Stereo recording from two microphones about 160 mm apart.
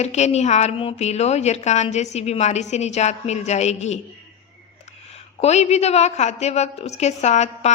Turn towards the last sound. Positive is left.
turn(degrees=45)  # may be behind; listen again after turning